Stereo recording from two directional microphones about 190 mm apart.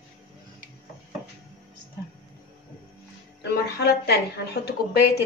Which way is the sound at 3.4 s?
60° left (ahead or behind).